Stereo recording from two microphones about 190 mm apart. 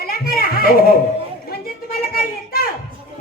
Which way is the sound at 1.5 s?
50° left (ahead or behind).